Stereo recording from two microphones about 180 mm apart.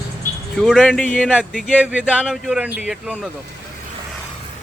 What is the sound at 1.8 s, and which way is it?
Speech, 5° right (ahead or behind).